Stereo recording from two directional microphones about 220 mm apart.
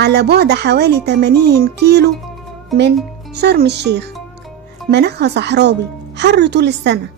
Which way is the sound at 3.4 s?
45° right (ahead or behind).